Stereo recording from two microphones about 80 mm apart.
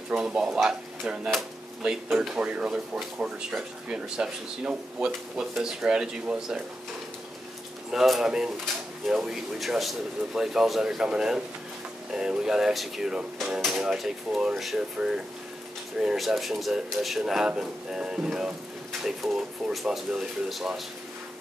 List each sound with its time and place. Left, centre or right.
0.1 s speech: centre
7.9 s speech: centre
14.8 s speech: centre